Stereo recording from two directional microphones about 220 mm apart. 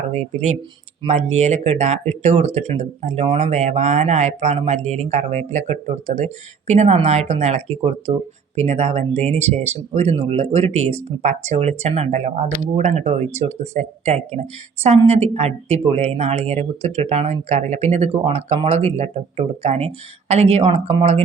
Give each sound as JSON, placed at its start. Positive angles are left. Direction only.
{"t": 0.1, "sound": "speech", "side_deg": -35}